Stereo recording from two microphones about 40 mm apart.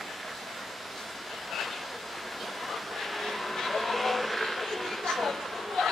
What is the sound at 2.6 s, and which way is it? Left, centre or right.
Vehicle, centre.